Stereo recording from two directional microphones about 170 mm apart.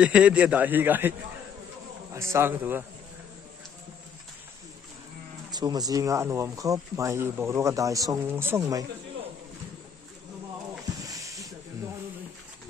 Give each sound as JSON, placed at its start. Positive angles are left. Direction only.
{"t": 0.0, "sound": "a man's voice", "side_deg": -5}
{"t": 2.1, "sound": "a man's voice", "side_deg": -15}
{"t": 5.5, "sound": "speech", "side_deg": -25}
{"t": 11.0, "sound": "snake", "side_deg": -20}